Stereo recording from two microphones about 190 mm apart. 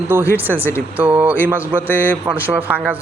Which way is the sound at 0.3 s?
10° right (ahead or behind).